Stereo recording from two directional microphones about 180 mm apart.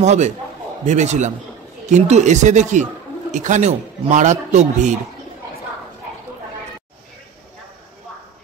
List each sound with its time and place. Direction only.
0.0 s speech: 40° right (ahead or behind)